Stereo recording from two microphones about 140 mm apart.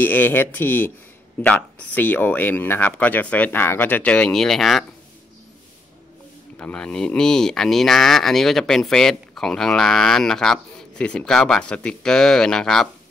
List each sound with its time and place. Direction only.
0.0 s speech: 15° left (ahead or behind)
6.6 s speech: 5° left (ahead or behind)